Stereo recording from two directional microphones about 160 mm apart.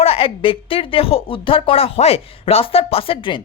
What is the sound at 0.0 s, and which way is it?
Speech, 35° left (ahead or behind).